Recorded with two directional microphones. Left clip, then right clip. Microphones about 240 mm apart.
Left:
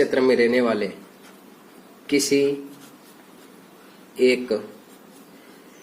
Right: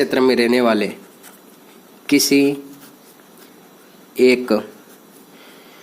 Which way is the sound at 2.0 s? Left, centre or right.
Right.